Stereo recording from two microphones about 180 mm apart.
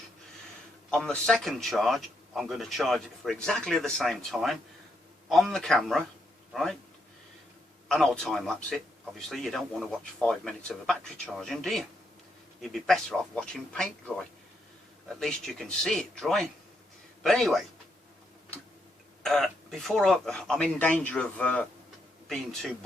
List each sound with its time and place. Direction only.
0.9 s a man's voice: 5° left (ahead or behind)
7.9 s a man's voice: 5° left (ahead or behind)
15.2 s a man's voice: 5° left (ahead or behind)
19.2 s a man's voice: centre (ahead or behind)